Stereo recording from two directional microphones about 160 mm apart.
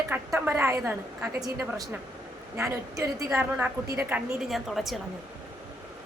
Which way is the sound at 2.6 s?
20° right (ahead or behind).